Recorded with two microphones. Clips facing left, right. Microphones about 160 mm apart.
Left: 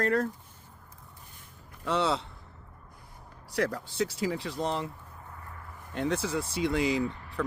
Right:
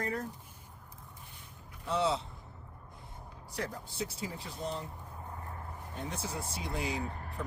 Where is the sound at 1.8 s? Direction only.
75° left (ahead or behind).